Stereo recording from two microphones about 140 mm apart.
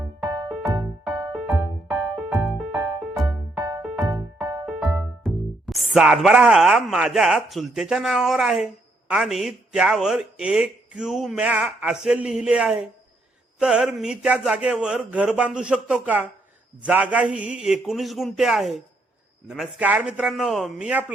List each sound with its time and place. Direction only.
0.3 s music: 35° right (ahead or behind)
1.3 s music: 5° right (ahead or behind)
3.9 s music: 20° right (ahead or behind)
4.6 s music: 5° right (ahead or behind)
5.2 s a man's voice: centre (ahead or behind)